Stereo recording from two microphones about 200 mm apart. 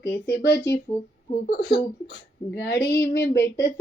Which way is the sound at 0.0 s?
15° left (ahead or behind).